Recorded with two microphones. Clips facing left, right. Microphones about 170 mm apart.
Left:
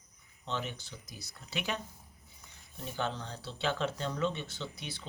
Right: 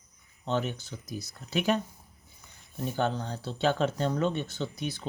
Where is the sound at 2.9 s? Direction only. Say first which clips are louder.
Right 6 dB; 45° right (ahead or behind).